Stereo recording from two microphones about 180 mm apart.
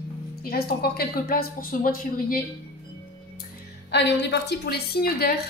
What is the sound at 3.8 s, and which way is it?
A woman's voice, 75° left (ahead or behind).